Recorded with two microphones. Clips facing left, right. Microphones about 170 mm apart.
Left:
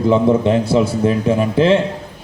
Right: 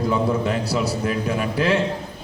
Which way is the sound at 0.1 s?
25° left (ahead or behind).